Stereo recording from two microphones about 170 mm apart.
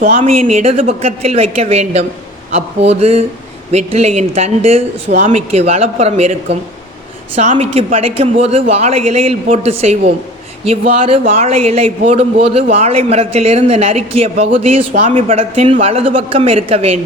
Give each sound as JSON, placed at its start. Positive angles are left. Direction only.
{"t": 0.0, "sound": "a man's voice", "side_deg": -45}